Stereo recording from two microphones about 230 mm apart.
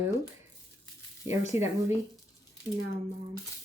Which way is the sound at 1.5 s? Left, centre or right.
Left.